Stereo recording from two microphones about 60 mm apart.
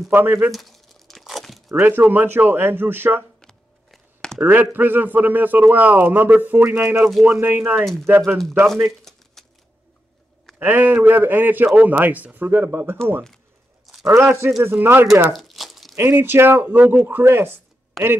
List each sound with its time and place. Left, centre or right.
0.1 s a man's voice: right
0.5 s crumpling: centre
1.8 s a man's voice: right
3.3 s a sound: centre
4.4 s a man's voice: right
7.8 s speech: centre
8.6 s a sound: centre
10.6 s a man's voice: right
14.1 s a man's voice: right
15.3 s a sound: centre
16.0 s a man's voice: right
17.0 s a man's voice: right
18.0 s speech: centre